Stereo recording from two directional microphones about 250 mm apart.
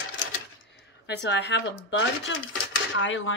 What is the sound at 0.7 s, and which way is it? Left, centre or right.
A woman's voice, left.